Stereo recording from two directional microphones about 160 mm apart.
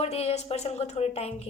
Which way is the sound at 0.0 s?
40° left (ahead or behind).